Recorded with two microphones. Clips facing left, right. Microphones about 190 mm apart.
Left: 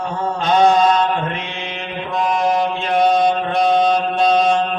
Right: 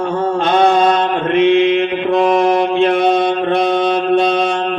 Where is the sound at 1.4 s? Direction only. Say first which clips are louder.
Right 18 dB; 60° right (ahead or behind).